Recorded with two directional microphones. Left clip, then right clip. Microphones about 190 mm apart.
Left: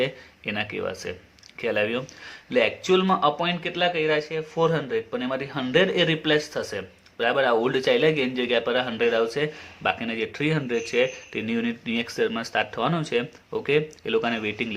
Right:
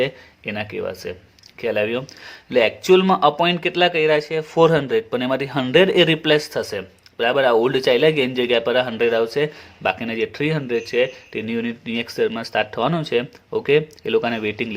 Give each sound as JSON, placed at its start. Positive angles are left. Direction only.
{"t": 0.0, "sound": "speech", "side_deg": -30}